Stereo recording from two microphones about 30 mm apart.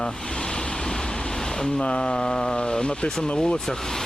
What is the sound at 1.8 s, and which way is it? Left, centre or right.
Speech, left.